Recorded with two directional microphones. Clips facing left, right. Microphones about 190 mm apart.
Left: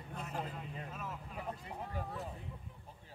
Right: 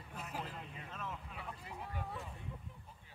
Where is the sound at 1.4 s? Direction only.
40° left (ahead or behind).